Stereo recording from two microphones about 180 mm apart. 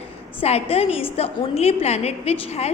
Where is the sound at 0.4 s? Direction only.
35° left (ahead or behind).